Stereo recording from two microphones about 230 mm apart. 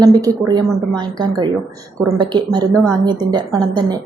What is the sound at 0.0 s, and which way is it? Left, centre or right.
A woman's voice, centre.